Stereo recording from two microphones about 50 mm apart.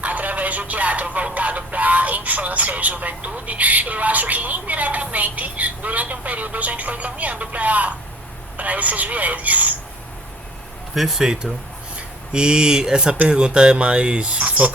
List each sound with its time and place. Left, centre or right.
0.0 s a man's voice: right
10.9 s speech: centre
12.3 s speech: centre
14.4 s a man's voice: right